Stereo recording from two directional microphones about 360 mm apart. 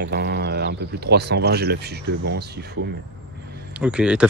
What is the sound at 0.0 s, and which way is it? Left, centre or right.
Speech, right.